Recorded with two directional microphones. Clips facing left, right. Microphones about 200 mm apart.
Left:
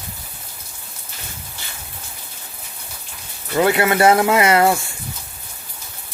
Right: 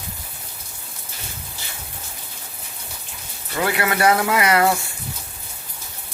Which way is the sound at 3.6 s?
25° left (ahead or behind).